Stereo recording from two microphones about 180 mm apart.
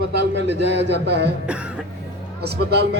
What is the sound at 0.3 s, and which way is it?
Speech, 75° right (ahead or behind).